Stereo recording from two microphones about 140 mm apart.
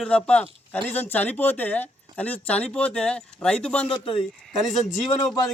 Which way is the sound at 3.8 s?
40° left (ahead or behind).